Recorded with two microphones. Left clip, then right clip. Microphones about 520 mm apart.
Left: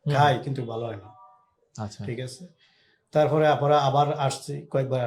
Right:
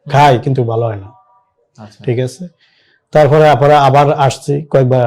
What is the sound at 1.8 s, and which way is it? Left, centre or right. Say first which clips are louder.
Speech: even; left.